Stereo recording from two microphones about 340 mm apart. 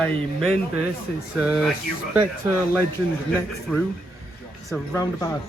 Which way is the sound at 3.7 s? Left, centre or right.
Centre.